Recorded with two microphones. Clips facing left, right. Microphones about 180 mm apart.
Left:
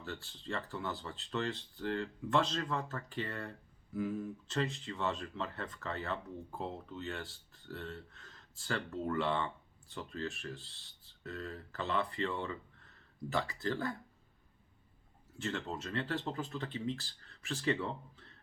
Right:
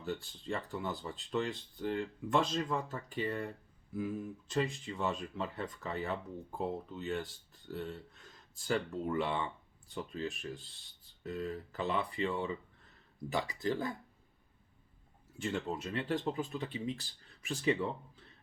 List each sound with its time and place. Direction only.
0.0 s speech: 15° right (ahead or behind)
15.4 s speech: 15° right (ahead or behind)